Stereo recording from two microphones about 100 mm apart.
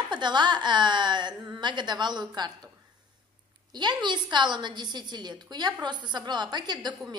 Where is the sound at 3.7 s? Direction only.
50° right (ahead or behind).